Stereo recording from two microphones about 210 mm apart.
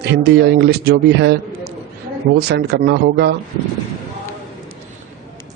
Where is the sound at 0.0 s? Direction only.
50° right (ahead or behind).